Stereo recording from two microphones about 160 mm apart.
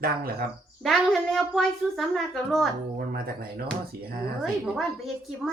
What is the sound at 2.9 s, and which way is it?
Speech, 70° right (ahead or behind).